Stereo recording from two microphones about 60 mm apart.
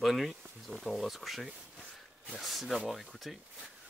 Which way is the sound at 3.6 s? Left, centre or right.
Centre.